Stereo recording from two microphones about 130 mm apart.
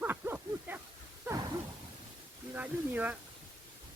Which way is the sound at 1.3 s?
30° right (ahead or behind).